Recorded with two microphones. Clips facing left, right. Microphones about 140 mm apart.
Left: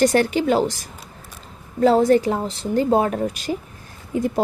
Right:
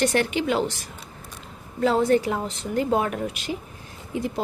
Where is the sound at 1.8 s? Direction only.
40° left (ahead or behind).